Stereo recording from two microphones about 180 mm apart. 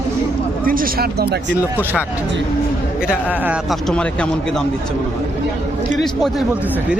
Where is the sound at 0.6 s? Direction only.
50° right (ahead or behind).